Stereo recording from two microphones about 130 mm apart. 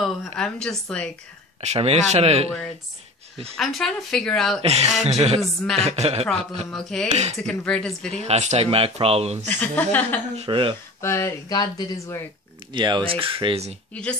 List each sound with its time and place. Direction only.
0.0 s a woman's voice: 5° left (ahead or behind)
1.6 s speech: 55° right (ahead or behind)
3.5 s a woman's voice: centre (ahead or behind)
4.6 s speech: 50° right (ahead or behind)
5.4 s a woman's voice: centre (ahead or behind)
5.8 s speech: 55° right (ahead or behind)
6.7 s a woman's voice: 5° left (ahead or behind)
8.2 s speech: 60° right (ahead or behind)
9.5 s speech: 10° left (ahead or behind)
10.3 s speech: 45° right (ahead or behind)
11.0 s speech: 20° left (ahead or behind)
12.7 s speech: 35° right (ahead or behind)